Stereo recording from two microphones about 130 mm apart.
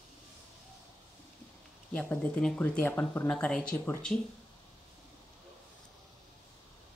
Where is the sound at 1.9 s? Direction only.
10° left (ahead or behind).